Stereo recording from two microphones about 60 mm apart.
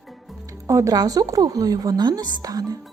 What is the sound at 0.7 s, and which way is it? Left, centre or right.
A woman's voice, right.